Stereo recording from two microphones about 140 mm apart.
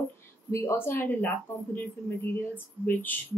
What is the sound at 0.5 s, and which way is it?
Speech, 20° left (ahead or behind).